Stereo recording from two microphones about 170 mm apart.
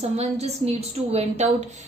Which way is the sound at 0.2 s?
40° right (ahead or behind).